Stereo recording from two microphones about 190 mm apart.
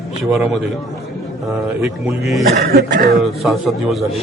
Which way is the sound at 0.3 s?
5° right (ahead or behind).